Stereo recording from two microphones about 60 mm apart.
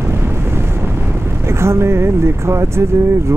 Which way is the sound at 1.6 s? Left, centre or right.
Right.